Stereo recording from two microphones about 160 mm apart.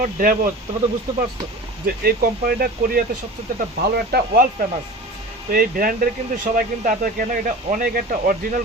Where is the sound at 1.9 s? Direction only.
70° right (ahead or behind).